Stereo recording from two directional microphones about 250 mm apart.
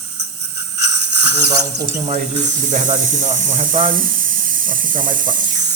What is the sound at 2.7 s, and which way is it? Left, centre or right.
Speech, right.